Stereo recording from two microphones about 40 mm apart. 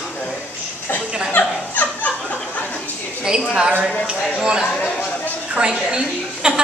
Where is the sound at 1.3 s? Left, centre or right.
Left.